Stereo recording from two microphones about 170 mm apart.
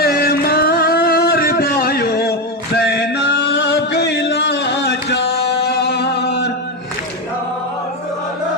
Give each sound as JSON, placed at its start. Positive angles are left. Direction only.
{"t": 0.0, "sound": "music", "side_deg": 65}